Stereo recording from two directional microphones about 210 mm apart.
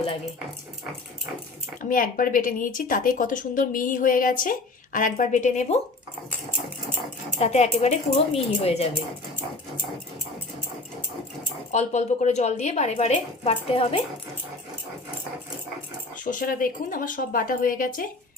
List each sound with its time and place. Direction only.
1.8 s speech: 40° left (ahead or behind)
7.3 s speech: 30° left (ahead or behind)
11.7 s speech: 35° left (ahead or behind)
16.1 s speech: 40° left (ahead or behind)